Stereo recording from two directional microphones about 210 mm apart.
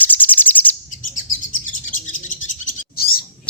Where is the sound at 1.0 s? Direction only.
40° left (ahead or behind).